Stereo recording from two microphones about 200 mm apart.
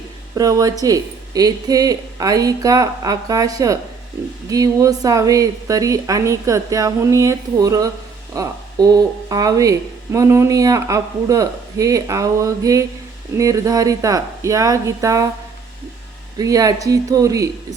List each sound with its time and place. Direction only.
0.3 s speech: 15° right (ahead or behind)
16.4 s speech: 15° right (ahead or behind)